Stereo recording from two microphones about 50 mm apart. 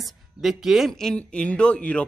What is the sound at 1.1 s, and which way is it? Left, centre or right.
Speech, left.